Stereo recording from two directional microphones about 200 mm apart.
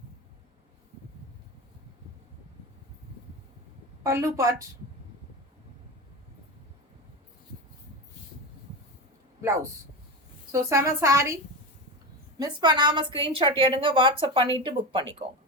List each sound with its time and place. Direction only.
4.0 s a woman's voice: 15° right (ahead or behind)
10.5 s a woman's voice: 15° right (ahead or behind)
12.4 s a woman's voice: 20° right (ahead or behind)